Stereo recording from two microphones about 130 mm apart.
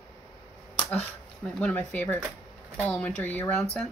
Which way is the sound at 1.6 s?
10° left (ahead or behind).